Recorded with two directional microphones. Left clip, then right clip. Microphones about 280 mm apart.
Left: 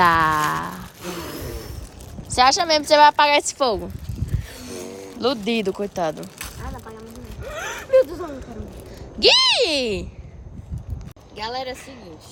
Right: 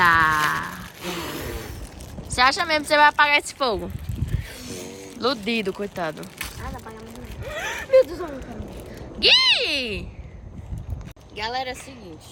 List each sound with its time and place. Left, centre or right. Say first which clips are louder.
0.0 s a sound: left 1 dB; centre
2.3 s a woman's voice: left 3 dB; centre
4.6 s music: left 5 dB; left
5.2 s a woman's voice: left 2 dB; centre
6.6 s a sound: even; centre
7.4 s zipper: right 1 dB; centre
9.1 s a woman's voice: left 1 dB; centre
11.3 s a woman's voice: right 1 dB; centre